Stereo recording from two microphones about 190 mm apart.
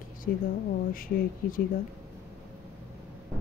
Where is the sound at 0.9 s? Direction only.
50° left (ahead or behind).